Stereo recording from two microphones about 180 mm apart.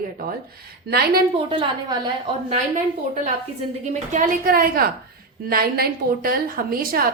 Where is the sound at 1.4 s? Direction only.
25° right (ahead or behind).